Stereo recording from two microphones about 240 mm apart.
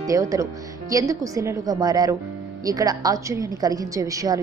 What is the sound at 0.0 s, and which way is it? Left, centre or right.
A woman's voice, centre.